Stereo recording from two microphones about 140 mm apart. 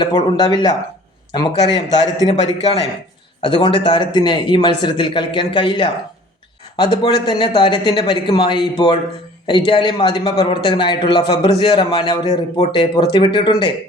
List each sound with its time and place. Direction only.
0.0 s speech: 30° left (ahead or behind)
2.3 s a man's voice: 50° left (ahead or behind)
3.4 s a man's voice: 35° left (ahead or behind)
12.7 s a man's voice: 35° left (ahead or behind)